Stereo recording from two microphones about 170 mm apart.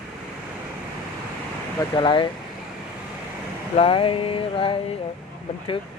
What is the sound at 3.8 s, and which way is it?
Speech, 35° left (ahead or behind).